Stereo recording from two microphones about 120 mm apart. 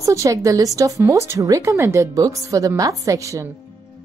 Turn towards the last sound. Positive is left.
turn(degrees=-25)  # may be behind; listen again after turning